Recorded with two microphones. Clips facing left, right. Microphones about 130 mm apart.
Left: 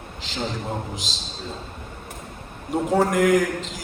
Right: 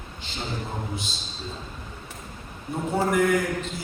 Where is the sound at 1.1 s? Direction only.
90° left.